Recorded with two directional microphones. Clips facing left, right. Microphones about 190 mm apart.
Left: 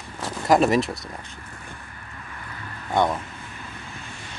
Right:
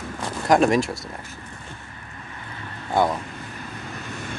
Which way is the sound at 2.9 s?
5° right (ahead or behind).